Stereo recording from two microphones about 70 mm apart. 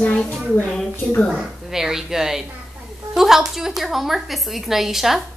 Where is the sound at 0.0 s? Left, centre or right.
Centre.